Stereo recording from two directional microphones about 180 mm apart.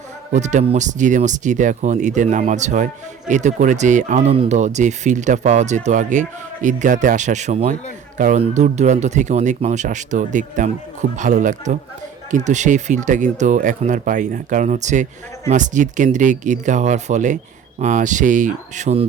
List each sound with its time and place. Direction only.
0.3 s speech: 40° right (ahead or behind)